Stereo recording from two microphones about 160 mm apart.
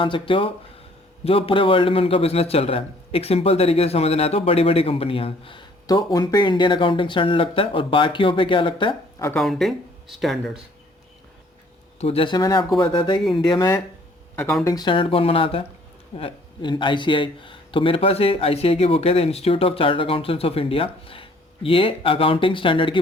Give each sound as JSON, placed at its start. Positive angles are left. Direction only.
{"t": 0.0, "sound": "a man's voice", "side_deg": 35}
{"t": 9.3, "sound": "speech", "side_deg": 0}
{"t": 11.9, "sound": "a man's voice", "side_deg": 40}
{"t": 12.4, "sound": "speech", "side_deg": 25}
{"t": 13.2, "sound": "speech", "side_deg": 5}
{"t": 13.5, "sound": "a man's voice", "side_deg": 20}